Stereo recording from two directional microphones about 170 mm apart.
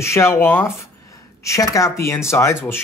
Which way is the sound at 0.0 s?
15° left (ahead or behind).